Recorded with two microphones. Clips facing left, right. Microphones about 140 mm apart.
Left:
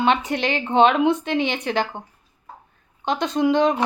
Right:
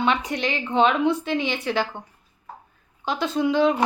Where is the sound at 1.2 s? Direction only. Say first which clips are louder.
Left 2 dB; 55° left (ahead or behind).